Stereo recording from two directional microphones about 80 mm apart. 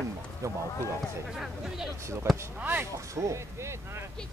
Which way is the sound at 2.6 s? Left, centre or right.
Right.